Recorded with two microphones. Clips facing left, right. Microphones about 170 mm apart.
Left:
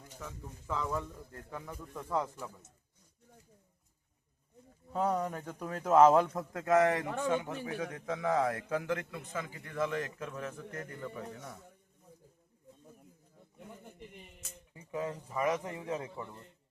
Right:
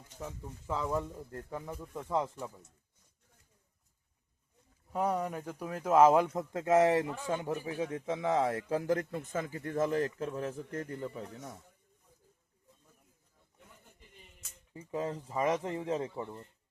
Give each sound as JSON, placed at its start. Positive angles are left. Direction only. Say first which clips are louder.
{"t": 0.2, "sound": "a man's voice", "louder": "right 4 dB", "side_deg": -30}
{"t": 1.5, "sound": "a man's voice", "louder": "even", "side_deg": -20}
{"t": 4.9, "sound": "speech", "louder": "even", "side_deg": -10}
{"t": 6.5, "sound": "a man's voice", "louder": "right 2 dB", "side_deg": -25}
{"t": 14.7, "sound": "a man's voice", "louder": "right 2 dB", "side_deg": -30}